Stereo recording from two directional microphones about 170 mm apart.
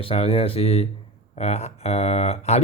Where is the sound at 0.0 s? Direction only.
35° left (ahead or behind).